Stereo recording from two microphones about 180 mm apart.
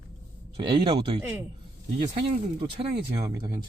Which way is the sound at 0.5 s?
30° right (ahead or behind).